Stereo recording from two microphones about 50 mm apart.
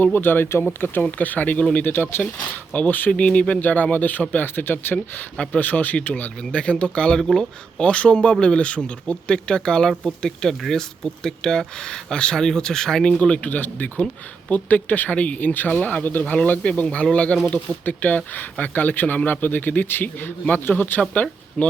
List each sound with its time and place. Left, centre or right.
0.0 s a man's voice: left
3.1 s a man's voice: left
5.5 s a man's voice: left
21.6 s speech: left